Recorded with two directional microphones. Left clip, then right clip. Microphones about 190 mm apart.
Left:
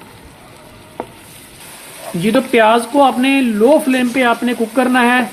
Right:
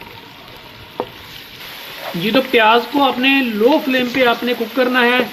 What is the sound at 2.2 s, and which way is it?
Speech, 40° left (ahead or behind).